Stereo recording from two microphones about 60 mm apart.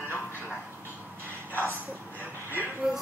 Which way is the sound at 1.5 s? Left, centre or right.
Left.